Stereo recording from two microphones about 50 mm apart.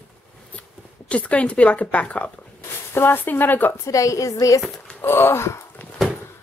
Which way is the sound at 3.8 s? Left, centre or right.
Left.